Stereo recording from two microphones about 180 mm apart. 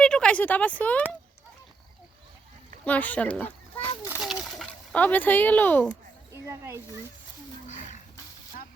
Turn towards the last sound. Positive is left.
turn(degrees=-15)  # may be behind; listen again after turning